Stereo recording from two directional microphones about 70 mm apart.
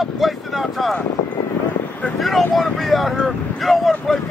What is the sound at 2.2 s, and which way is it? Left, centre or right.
Speech, centre.